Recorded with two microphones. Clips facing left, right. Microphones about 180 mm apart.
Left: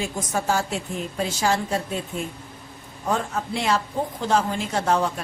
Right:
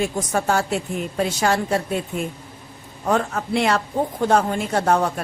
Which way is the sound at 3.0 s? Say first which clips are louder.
Right 4 dB; 65° right (ahead or behind).